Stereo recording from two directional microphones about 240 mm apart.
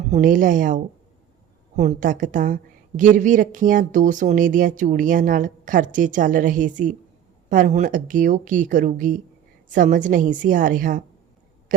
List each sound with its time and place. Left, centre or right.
0.1 s a woman's voice: right